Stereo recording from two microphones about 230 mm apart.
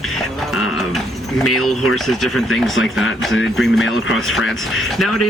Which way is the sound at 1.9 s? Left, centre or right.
Centre.